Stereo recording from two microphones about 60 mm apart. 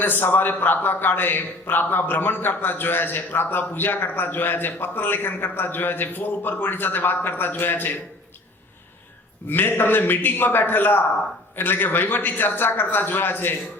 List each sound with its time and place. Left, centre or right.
0.0 s a man's voice: left
9.5 s a man's voice: left